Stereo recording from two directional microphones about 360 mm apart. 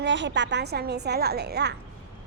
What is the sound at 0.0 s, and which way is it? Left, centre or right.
A woman's voice, right.